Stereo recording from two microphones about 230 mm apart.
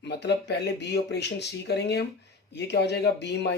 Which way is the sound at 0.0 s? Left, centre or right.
Left.